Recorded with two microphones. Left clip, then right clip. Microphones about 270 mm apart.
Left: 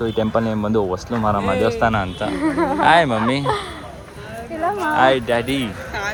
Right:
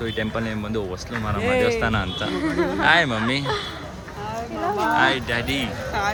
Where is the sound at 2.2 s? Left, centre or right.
Centre.